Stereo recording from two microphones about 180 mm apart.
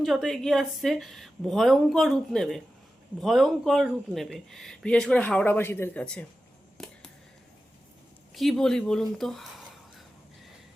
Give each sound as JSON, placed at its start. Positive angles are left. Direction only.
{"t": 0.0, "sound": "speech", "side_deg": 0}
{"t": 6.7, "sound": "a sound", "side_deg": 5}
{"t": 8.4, "sound": "speech", "side_deg": 0}